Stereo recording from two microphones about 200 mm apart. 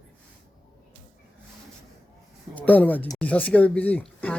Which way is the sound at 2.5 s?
10° left (ahead or behind).